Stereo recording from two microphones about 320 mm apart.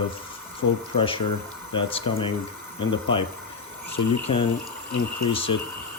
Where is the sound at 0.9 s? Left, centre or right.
Centre.